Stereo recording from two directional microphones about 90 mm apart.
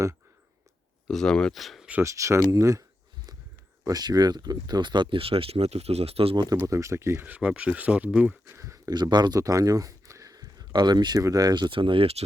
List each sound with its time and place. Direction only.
1.0 s speech: 5° left (ahead or behind)
2.0 s speech: 35° right (ahead or behind)
3.8 s speech: 45° right (ahead or behind); by 6.3 s 90° right
6.3 s speech: 50° right (ahead or behind)
6.7 s speech: 35° right (ahead or behind); by 8.4 s 15° right (ahead or behind)
8.5 s a sound: 35° right (ahead or behind)
9.0 s speech: 55° right (ahead or behind)
9.4 s speech: 40° right (ahead or behind)
11.5 s speech: 65° right (ahead or behind); by 12.1 s 80° right